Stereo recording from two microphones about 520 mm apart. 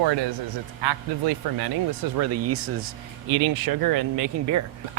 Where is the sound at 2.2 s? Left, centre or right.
Right.